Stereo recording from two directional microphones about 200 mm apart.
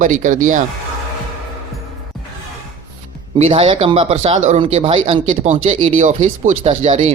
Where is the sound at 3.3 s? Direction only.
30° right (ahead or behind).